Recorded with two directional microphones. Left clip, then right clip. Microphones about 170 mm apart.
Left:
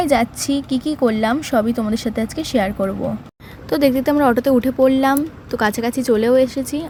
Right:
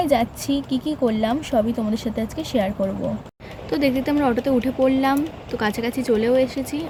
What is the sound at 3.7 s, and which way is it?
Speech, 45° left (ahead or behind).